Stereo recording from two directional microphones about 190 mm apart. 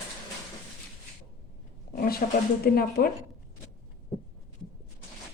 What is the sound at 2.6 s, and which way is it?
Speech, 50° left (ahead or behind).